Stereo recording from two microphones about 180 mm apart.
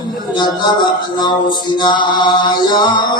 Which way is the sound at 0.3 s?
25° left (ahead or behind).